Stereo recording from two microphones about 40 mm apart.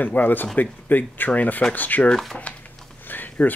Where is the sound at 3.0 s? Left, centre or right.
Left.